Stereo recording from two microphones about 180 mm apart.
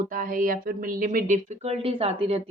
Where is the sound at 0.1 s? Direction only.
50° right (ahead or behind).